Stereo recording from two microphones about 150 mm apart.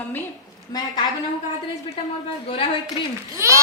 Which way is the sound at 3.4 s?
20° right (ahead or behind).